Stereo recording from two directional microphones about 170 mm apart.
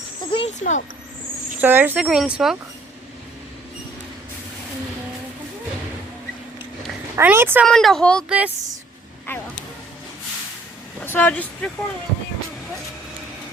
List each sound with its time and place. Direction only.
0.3 s a sound: 35° left (ahead or behind)
0.6 s speech: 50° left (ahead or behind)
1.6 s speech: 10° right (ahead or behind)
7.2 s speech: 10° right (ahead or behind)
7.6 s speech: centre (ahead or behind)
8.3 s speech: 10° right (ahead or behind)
11.0 s speech: 10° left (ahead or behind)